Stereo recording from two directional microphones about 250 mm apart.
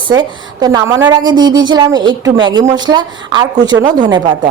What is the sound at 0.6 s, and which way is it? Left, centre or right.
A woman's voice, centre.